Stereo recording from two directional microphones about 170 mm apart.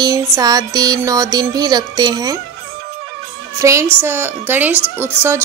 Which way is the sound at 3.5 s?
20° right (ahead or behind).